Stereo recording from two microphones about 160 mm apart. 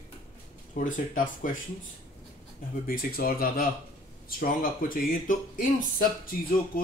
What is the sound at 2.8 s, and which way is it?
Speech, 65° left (ahead or behind).